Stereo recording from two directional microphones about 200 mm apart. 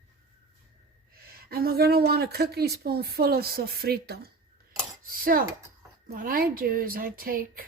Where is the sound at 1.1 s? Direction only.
50° right (ahead or behind).